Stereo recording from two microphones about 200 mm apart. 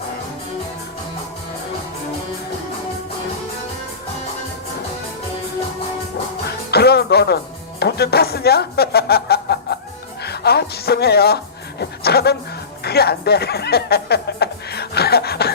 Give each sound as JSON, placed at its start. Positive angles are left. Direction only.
{"t": 6.7, "sound": "music", "side_deg": 55}
{"t": 7.8, "sound": "speech", "side_deg": 55}
{"t": 12.8, "sound": "music", "side_deg": 50}